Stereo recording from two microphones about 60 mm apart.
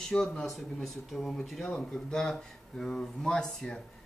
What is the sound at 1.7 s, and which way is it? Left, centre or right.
Speech, centre.